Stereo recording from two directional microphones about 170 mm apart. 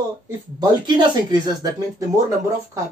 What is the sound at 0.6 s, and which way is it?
A woman's voice, 25° right (ahead or behind).